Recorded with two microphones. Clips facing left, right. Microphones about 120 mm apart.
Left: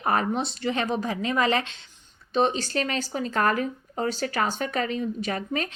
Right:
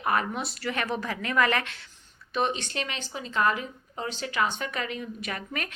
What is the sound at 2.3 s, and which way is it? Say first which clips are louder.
Speech: left 5 dB; 35° left (ahead or behind).